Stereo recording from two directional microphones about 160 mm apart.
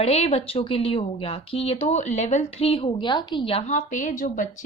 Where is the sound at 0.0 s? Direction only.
40° left (ahead or behind).